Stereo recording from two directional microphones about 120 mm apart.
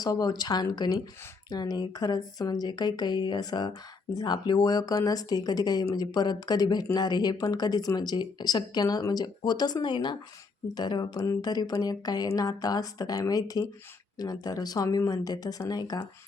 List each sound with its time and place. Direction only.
0.0 s speech: 30° left (ahead or behind)